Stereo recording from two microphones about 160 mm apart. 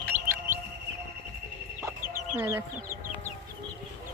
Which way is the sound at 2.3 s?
15° right (ahead or behind).